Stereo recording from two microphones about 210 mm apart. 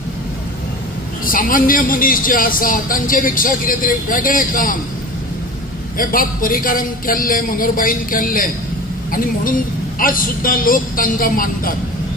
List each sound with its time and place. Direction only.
1.2 s a man's voice: 40° left (ahead or behind)
5.9 s a man's voice: 40° left (ahead or behind)